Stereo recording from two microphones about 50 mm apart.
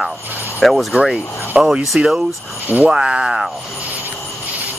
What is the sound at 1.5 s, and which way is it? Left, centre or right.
Speech, right.